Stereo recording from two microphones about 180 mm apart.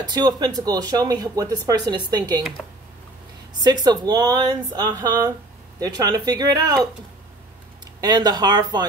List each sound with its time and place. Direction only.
0.0 s speech: 25° right (ahead or behind)
3.6 s speech: 20° right (ahead or behind)